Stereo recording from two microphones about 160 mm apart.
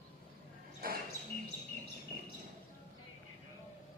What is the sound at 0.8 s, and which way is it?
Basketball bounce, 65° right (ahead or behind).